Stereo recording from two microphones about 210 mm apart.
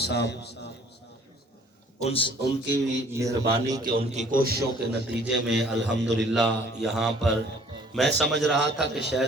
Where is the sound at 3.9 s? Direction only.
40° right (ahead or behind).